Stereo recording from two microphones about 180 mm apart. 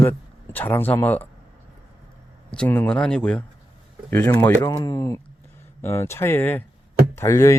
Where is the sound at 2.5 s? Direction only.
5° left (ahead or behind).